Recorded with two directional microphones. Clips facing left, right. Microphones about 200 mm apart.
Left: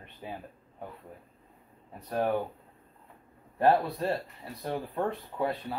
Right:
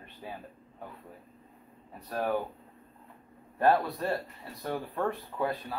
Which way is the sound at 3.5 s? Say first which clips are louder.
Left 1 dB; 25° left (ahead or behind).